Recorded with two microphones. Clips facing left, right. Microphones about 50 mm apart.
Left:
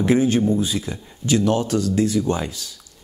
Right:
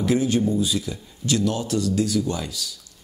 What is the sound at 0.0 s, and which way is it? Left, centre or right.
Speech, left.